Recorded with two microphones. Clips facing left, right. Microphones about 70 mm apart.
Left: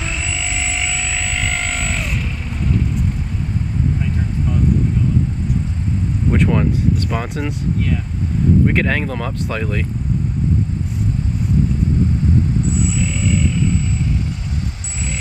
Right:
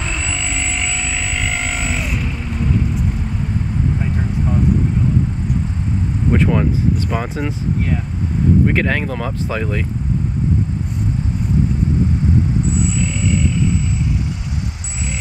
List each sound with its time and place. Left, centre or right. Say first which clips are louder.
0.0 s a sound: right 1 dB; centre
4.0 s vehicle: right 1 dB; right
6.3 s speech: right 1 dB; centre
8.6 s speech: even; centre
12.7 s vehicle: even; centre